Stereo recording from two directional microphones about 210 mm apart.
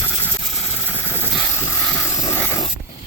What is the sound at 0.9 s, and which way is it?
Helicopter, 10° left (ahead or behind).